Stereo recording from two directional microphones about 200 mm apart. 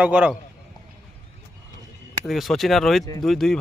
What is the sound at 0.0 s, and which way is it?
Speech, 5° right (ahead or behind).